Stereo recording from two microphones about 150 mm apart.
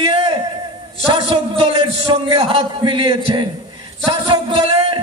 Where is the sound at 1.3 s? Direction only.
40° right (ahead or behind).